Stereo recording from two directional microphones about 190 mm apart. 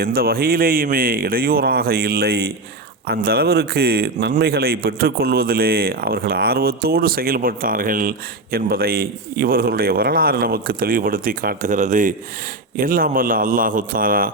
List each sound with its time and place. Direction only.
0.0 s a man's voice: 55° right (ahead or behind)